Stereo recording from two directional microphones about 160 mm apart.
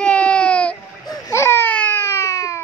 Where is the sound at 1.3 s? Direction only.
15° left (ahead or behind).